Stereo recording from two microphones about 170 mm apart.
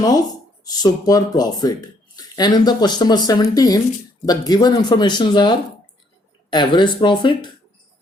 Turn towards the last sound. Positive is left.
turn(degrees=25)  # may be behind; listen again after turning